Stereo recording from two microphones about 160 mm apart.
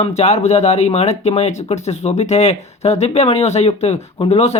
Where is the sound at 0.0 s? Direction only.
40° left (ahead or behind).